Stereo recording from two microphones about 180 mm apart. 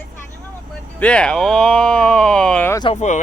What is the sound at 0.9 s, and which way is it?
Speech, 5° left (ahead or behind).